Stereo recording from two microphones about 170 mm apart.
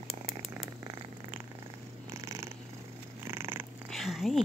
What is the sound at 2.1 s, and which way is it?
Purr, 20° right (ahead or behind).